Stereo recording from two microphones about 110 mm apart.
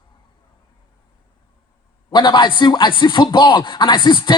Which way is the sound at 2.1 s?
45° left (ahead or behind).